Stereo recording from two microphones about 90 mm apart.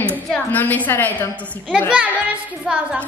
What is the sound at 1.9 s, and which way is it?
A child's voice, 15° right (ahead or behind).